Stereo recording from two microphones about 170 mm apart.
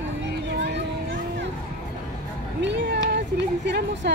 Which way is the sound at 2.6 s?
85° right.